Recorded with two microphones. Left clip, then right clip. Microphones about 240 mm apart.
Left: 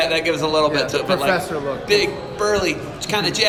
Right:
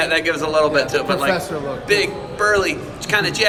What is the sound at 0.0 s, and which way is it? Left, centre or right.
A man's voice, centre.